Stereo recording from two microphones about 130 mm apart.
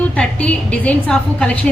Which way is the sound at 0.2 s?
10° left (ahead or behind).